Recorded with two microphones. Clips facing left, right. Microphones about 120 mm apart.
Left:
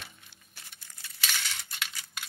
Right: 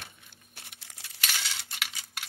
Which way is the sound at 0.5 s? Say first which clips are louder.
Right 2 dB; 70° right (ahead or behind).